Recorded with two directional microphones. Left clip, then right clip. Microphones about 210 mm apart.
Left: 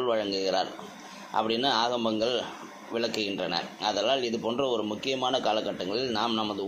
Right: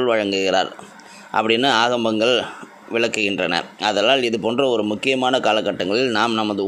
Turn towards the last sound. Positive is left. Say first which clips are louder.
# right 9 dB
turn(degrees=-45)  # may be behind; listen again after turning